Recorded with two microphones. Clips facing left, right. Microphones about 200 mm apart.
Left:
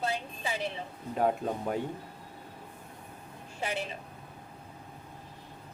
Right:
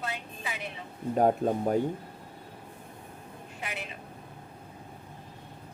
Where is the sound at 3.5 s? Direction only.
30° left (ahead or behind).